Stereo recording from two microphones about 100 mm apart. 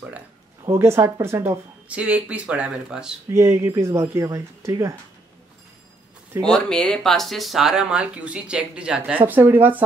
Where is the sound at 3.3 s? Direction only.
25° right (ahead or behind).